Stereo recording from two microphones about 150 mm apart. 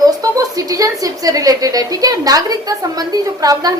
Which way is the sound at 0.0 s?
25° right (ahead or behind).